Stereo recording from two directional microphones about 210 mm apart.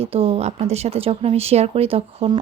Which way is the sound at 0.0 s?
30° right (ahead or behind).